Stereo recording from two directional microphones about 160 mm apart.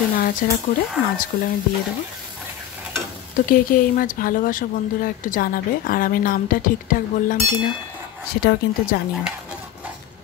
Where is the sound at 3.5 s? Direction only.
60° left (ahead or behind).